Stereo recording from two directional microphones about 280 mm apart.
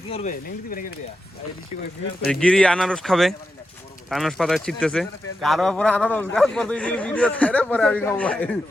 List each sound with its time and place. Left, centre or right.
0.1 s speech: left
2.3 s speech: centre